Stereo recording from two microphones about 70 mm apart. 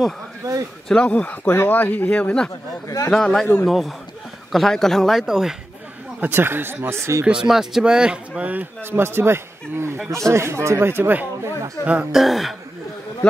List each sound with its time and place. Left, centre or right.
0.8 s a man's voice: centre
5.2 s a man's voice: centre
6.2 s speech: right
7.2 s speech: centre
9.0 s speech: right
10.0 s speech: right; by 12.1 s centre
12.1 s a man's voice: centre